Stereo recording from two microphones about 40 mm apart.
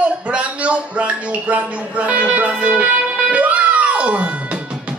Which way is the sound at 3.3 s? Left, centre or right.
Right.